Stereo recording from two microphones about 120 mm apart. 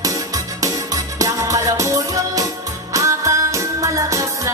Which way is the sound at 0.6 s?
30° right (ahead or behind).